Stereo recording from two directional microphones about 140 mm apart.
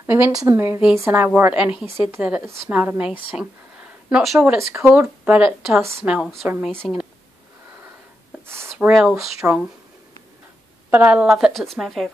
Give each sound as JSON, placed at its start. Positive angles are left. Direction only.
{"t": 0.0, "sound": "a woman's voice", "side_deg": -20}
{"t": 6.0, "sound": "a woman's voice", "side_deg": -5}
{"t": 8.7, "sound": "speech", "side_deg": -5}
{"t": 9.4, "sound": "a woman's voice", "side_deg": -15}
{"t": 10.9, "sound": "speech", "side_deg": -10}